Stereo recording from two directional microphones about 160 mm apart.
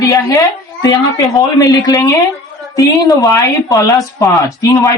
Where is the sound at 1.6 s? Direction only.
20° left (ahead or behind).